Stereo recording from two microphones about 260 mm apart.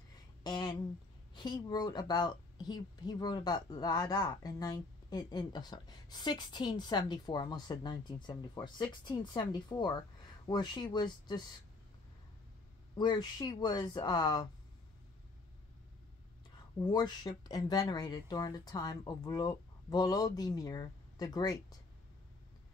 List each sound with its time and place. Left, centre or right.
0.4 s a sound: centre
1.3 s a woman's voice: centre
12.9 s a woman's voice: centre
16.8 s a woman's voice: centre